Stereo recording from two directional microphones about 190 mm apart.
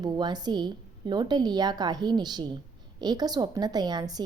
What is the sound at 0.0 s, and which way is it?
A woman's voice, 20° right (ahead or behind).